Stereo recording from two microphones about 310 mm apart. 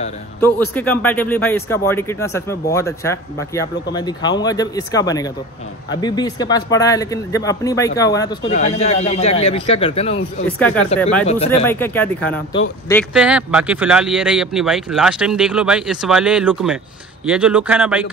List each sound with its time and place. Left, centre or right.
0.4 s a man's voice: centre
10.6 s speech: centre
11.2 s a man's voice: centre
11.6 s a man's voice: centre